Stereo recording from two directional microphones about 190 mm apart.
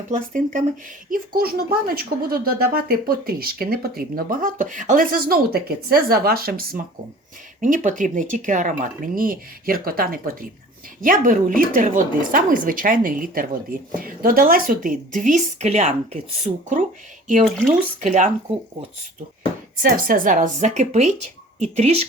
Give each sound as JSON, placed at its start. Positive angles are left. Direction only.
{"t": 0.1, "sound": "speech", "side_deg": -40}
{"t": 7.6, "sound": "speech", "side_deg": -40}
{"t": 18.0, "sound": "speech", "side_deg": -40}
{"t": 19.8, "sound": "speech", "side_deg": -45}